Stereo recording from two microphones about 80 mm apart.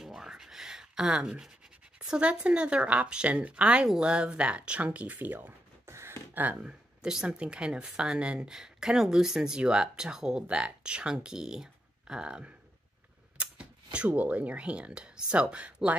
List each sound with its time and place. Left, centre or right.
0.0 s a sound: centre
2.0 s speech: centre
13.9 s speech: centre